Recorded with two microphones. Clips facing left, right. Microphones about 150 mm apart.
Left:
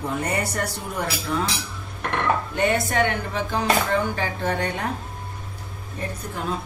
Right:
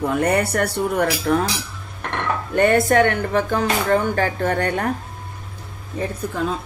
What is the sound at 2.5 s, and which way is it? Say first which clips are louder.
Speech: right 12 dB; 55° right (ahead or behind).